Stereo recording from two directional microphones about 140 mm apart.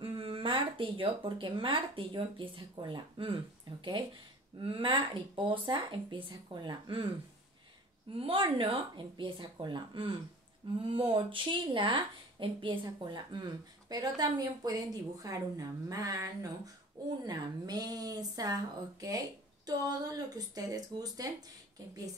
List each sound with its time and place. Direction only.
0.0 s speech: 40° right (ahead or behind)
4.6 s speech: 35° right (ahead or behind)
8.1 s speech: 40° right (ahead or behind)